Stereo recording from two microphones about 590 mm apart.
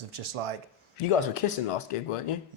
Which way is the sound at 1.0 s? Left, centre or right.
Left.